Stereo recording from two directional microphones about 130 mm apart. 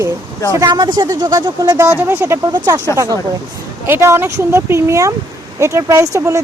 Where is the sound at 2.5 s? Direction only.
30° right (ahead or behind).